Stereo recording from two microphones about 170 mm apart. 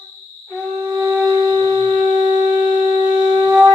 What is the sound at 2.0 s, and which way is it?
Shofar, 40° right (ahead or behind).